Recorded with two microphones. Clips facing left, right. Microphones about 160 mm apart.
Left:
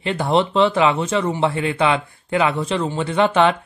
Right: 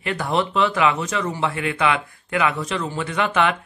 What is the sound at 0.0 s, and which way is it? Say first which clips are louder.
A man's voice: left 4 dB; 25° left (ahead or behind).